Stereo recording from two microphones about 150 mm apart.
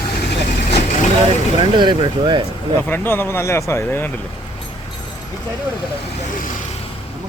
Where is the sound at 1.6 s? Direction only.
35° right (ahead or behind).